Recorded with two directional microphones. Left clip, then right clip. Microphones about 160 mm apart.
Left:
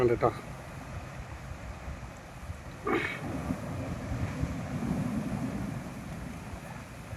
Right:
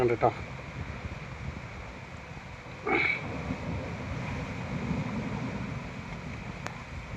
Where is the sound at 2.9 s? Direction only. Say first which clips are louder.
Right 4 dB; 25° left (ahead or behind).